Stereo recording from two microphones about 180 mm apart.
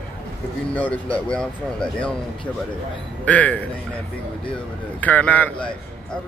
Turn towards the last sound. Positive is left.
turn(degrees=5)  # may be behind; listen again after turning